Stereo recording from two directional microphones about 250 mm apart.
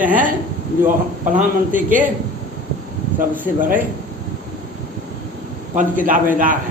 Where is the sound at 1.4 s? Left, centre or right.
Right.